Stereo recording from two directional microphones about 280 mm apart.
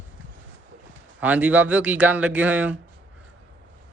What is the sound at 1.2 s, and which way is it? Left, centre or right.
A man's voice, centre.